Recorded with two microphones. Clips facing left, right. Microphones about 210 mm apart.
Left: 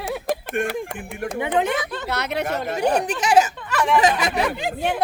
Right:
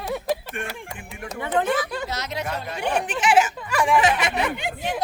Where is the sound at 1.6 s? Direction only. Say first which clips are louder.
Right 1 dB; 20° left (ahead or behind).